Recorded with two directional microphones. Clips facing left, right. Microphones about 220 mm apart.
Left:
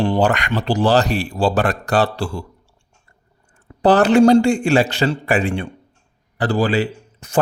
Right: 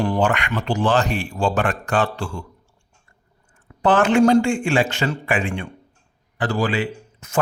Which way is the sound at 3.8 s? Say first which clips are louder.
Left 4 dB; 35° left (ahead or behind).